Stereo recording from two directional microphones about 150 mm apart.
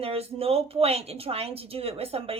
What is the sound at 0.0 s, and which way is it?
A woman's voice, 40° right (ahead or behind).